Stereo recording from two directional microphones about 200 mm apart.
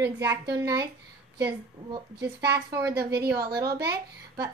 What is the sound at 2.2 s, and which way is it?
A woman's voice, 10° right (ahead or behind).